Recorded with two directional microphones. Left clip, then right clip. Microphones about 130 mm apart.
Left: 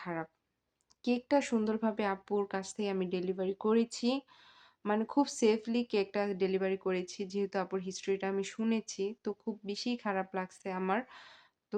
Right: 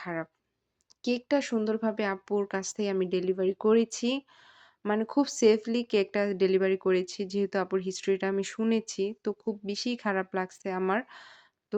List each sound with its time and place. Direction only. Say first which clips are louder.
0.0 s speech: right 4 dB; 30° right (ahead or behind)